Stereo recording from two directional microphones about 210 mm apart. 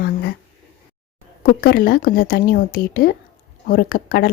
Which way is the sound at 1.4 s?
45° left (ahead or behind).